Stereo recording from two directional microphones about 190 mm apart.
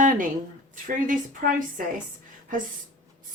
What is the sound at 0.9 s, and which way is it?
Speech, 45° right (ahead or behind).